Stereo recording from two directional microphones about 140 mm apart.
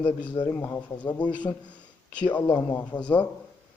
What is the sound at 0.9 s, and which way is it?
Speech, 30° left (ahead or behind).